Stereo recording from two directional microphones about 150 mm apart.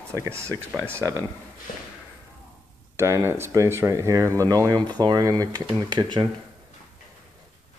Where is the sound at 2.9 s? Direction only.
15° right (ahead or behind).